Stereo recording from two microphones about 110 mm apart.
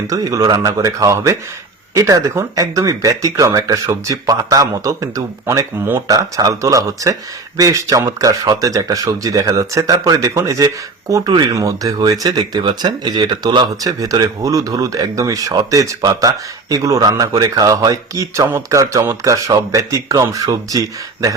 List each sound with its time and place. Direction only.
0.1 s speech: 35° right (ahead or behind)